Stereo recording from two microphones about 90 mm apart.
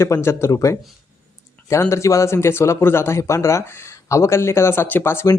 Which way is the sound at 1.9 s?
35° left (ahead or behind).